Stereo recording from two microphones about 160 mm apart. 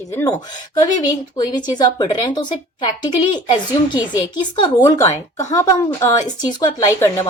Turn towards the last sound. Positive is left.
turn(degrees=20)  # may be behind; listen again after turning